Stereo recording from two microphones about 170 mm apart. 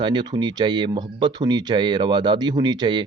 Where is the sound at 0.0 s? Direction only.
25° right (ahead or behind).